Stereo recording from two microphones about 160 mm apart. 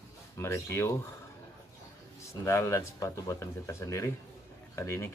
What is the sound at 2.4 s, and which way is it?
Speech, 15° left (ahead or behind).